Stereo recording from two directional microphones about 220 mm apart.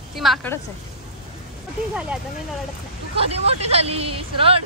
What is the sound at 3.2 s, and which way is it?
Speech, 25° right (ahead or behind).